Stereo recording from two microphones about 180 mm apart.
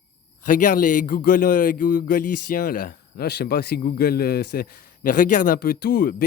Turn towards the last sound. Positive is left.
turn(degrees=50)  # may be behind; listen again after turning